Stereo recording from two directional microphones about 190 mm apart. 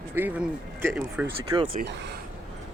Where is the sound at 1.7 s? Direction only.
60° right (ahead or behind).